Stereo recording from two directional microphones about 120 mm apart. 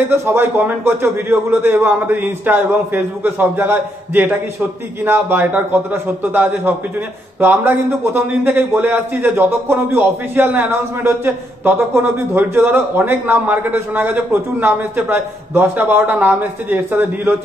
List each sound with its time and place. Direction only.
0.3 s a man's voice: 20° right (ahead or behind)